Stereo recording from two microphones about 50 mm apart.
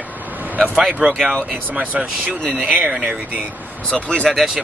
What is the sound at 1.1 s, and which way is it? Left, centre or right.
Speech, centre.